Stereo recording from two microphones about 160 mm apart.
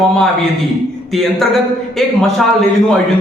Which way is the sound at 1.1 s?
Centre (ahead or behind).